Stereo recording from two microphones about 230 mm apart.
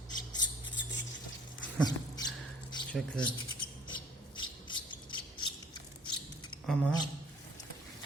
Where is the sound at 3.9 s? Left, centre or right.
Centre.